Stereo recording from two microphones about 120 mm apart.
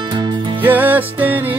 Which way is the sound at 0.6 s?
15° right (ahead or behind).